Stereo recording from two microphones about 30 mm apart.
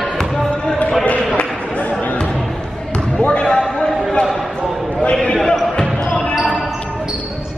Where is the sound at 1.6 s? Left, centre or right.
Left.